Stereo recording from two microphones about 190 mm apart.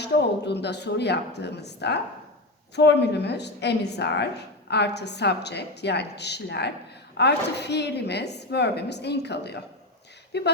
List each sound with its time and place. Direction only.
0.0 s a woman's voice: 60° left (ahead or behind)